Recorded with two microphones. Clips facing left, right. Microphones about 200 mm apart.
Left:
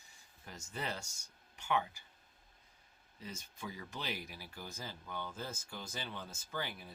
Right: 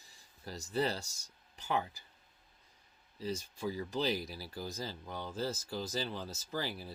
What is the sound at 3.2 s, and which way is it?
Speech, 35° right (ahead or behind).